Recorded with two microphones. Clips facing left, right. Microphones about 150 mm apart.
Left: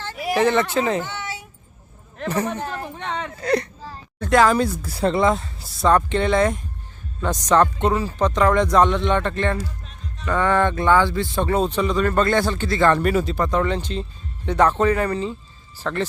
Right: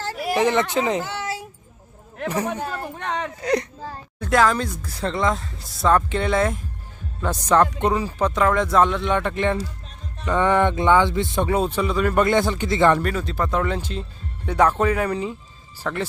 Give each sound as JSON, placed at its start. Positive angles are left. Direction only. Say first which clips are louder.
{"t": 0.3, "sound": "speech", "louder": "left 1 dB", "side_deg": -15}
{"t": 2.1, "sound": "speech", "louder": "left 1 dB", "side_deg": -10}
{"t": 4.2, "sound": "a woman's voice", "louder": "left 2 dB", "side_deg": 0}
{"t": 4.5, "sound": "speech", "louder": "left 6 dB", "side_deg": 10}
{"t": 10.2, "sound": "a sound", "louder": "right 1 dB", "side_deg": -20}
{"t": 11.4, "sound": "speech", "louder": "left 1 dB", "side_deg": -10}
{"t": 13.0, "sound": "speech", "louder": "left 4 dB", "side_deg": 5}